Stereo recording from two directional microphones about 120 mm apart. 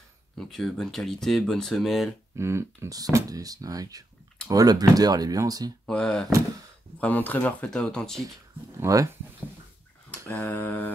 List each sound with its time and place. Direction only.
0.4 s speech: 5° left (ahead or behind)
2.3 s speech: 20° right (ahead or behind)
5.9 s speech: 5° left (ahead or behind)
8.7 s speech: 25° right (ahead or behind)
10.4 s speech: 15° left (ahead or behind)